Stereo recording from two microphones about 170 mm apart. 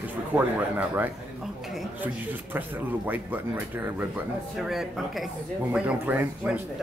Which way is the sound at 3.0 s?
10° right (ahead or behind).